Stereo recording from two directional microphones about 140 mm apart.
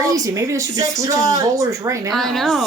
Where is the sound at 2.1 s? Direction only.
Centre (ahead or behind).